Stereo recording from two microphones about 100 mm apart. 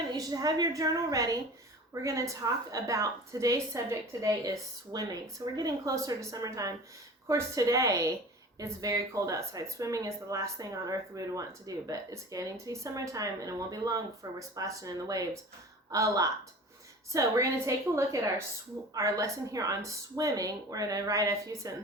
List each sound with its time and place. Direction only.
0.1 s speech: 40° right (ahead or behind)